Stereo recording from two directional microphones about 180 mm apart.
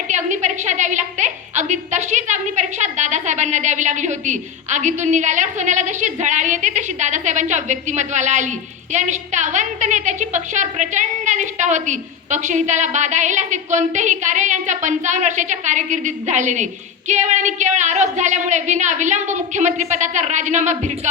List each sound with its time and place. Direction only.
0.1 s a woman's voice: 40° right (ahead or behind)